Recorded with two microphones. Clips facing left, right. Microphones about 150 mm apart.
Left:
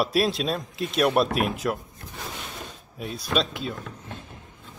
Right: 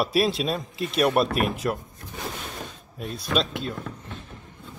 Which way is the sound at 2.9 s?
Centre (ahead or behind).